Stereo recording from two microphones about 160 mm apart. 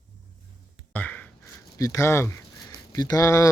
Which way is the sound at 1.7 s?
20° left (ahead or behind).